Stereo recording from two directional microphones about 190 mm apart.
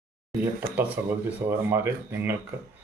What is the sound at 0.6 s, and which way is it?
Speech, 55° right (ahead or behind).